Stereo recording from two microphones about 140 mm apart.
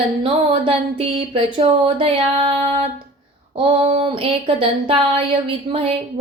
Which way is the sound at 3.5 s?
40° right (ahead or behind).